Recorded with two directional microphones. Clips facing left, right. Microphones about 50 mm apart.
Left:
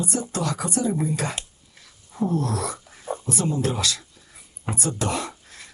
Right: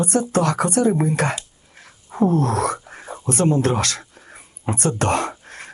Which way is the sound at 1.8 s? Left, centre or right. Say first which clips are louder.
Right 7 dB; right.